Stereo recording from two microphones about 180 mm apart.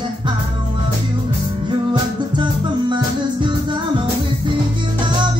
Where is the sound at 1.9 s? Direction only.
25° right (ahead or behind).